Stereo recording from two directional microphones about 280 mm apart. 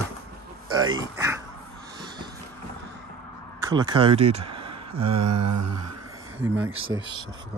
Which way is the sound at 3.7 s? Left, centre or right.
Centre.